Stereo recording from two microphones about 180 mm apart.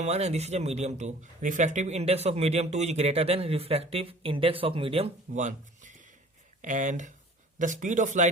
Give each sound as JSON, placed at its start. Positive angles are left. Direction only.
{"t": 0.0, "sound": "speech", "side_deg": -35}